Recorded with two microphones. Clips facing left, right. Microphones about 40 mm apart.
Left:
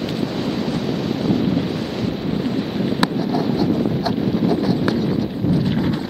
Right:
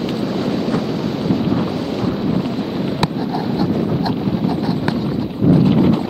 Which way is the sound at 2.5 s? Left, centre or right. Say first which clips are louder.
Right 1 dB; centre.